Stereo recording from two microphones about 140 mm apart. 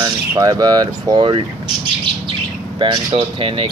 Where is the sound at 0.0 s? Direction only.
25° right (ahead or behind).